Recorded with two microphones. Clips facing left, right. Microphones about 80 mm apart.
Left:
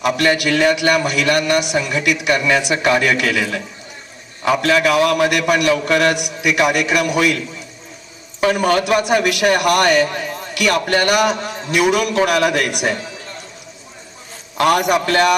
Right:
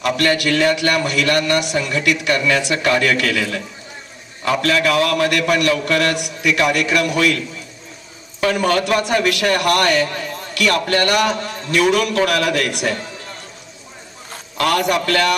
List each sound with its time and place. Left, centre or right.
0.0 s a man's voice: centre
4.6 s a man's voice: centre
14.6 s a man's voice: centre